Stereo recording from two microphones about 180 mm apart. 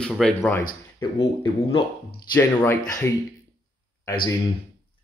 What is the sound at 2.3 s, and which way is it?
Speech, 15° left (ahead or behind).